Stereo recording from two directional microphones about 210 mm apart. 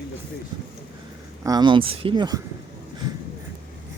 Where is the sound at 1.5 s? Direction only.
20° right (ahead or behind).